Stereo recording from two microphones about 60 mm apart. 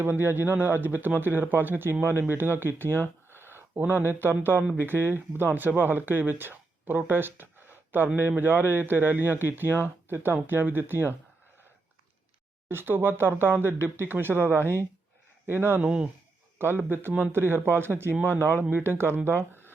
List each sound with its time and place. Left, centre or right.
0.0 s speech: right
2.9 s a sound: left
3.4 s speech: right
12.6 s speech: right
15.8 s speech: centre
16.7 s speech: right